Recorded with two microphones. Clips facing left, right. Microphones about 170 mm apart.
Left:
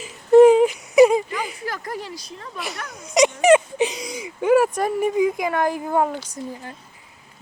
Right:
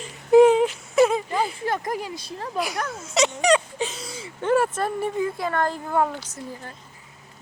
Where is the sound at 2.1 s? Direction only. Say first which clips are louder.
Right 4 dB; 30° right (ahead or behind).